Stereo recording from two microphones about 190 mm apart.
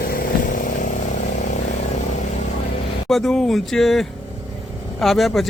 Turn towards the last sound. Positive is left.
turn(degrees=0)  # may be behind; listen again after turning